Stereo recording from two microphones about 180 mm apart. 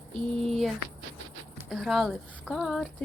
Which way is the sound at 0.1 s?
Centre (ahead or behind).